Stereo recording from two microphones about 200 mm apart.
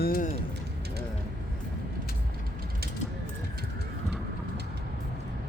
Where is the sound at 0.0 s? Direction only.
50° left (ahead or behind).